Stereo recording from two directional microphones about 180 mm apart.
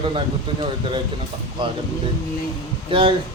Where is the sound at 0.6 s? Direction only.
25° right (ahead or behind).